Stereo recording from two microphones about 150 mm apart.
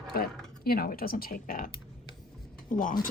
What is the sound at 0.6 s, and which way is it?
Speech, 85° left.